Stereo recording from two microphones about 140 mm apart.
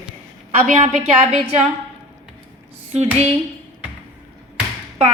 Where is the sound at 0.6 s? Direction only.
60° right (ahead or behind).